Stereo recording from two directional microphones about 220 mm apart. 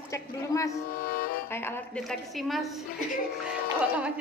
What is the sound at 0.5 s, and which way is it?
Music, 15° left (ahead or behind).